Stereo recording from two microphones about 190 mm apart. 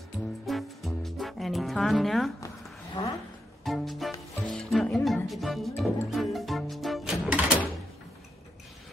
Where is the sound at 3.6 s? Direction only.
Centre (ahead or behind).